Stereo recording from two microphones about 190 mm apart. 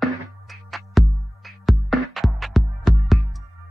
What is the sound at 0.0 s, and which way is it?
Music, centre (ahead or behind).